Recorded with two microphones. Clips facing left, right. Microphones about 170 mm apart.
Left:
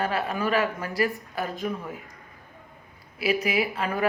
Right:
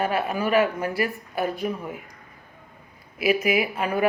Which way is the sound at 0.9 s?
40° left (ahead or behind).